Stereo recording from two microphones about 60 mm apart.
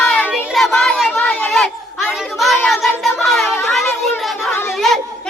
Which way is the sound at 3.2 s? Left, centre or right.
Centre.